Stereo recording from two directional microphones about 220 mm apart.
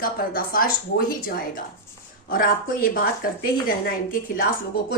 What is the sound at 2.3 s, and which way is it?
A woman's voice, 40° left (ahead or behind).